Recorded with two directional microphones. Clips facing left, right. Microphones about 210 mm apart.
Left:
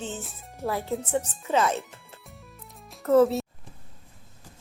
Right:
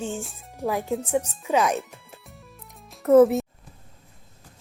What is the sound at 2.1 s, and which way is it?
Music, centre (ahead or behind).